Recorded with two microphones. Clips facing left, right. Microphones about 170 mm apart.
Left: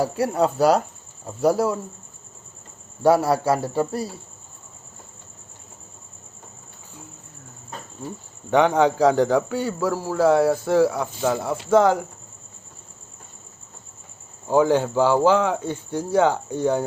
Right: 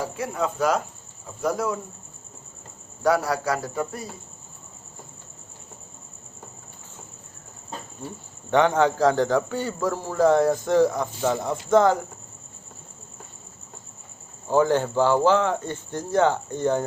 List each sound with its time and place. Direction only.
0.0 s speech: 35° left (ahead or behind)
3.0 s speech: 25° left (ahead or behind)
8.4 s a man's voice: 10° left (ahead or behind)
14.4 s a man's voice: 10° left (ahead or behind)